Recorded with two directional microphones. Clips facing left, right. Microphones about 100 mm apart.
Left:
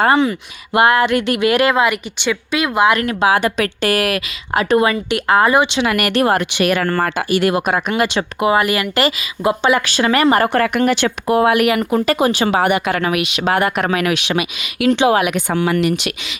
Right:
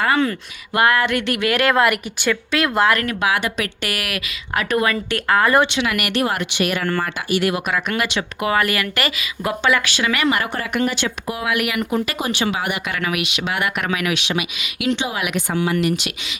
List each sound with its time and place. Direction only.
0.2 s a woman's voice: 20° left (ahead or behind)
1.7 s speech: centre (ahead or behind)
2.9 s a woman's voice: 25° left (ahead or behind)
5.8 s speech: 45° left (ahead or behind)
8.4 s a woman's voice: 20° left (ahead or behind)
9.8 s speech: 40° left (ahead or behind)
10.8 s speech: 60° left (ahead or behind); by 11.9 s 40° left (ahead or behind)
11.9 s speech: 50° left (ahead or behind)
14.9 s speech: 70° left (ahead or behind)